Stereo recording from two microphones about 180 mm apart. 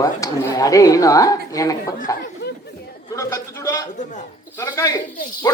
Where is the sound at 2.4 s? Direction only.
65° left (ahead or behind).